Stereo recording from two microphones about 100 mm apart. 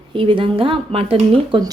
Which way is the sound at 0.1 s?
60° right (ahead or behind).